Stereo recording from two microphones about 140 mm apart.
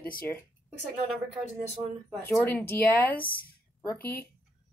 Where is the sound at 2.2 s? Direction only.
15° left (ahead or behind).